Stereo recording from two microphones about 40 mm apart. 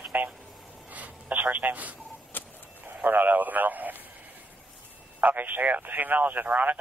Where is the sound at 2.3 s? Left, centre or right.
Left.